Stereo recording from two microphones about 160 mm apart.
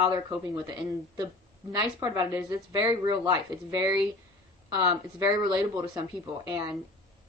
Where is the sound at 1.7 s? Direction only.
20° right (ahead or behind).